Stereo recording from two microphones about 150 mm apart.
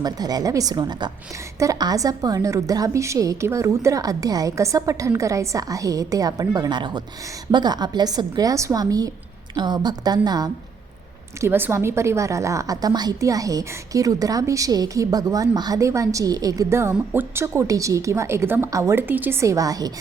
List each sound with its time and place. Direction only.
0.0 s a woman's voice: 25° right (ahead or behind)
11.3 s a woman's voice: 15° right (ahead or behind)